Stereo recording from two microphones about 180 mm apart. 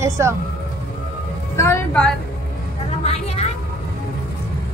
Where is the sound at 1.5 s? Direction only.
10° left (ahead or behind).